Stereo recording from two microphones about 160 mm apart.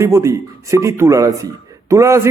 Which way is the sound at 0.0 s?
20° right (ahead or behind).